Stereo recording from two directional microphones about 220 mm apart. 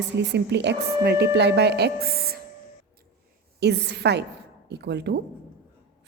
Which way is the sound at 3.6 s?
50° right (ahead or behind).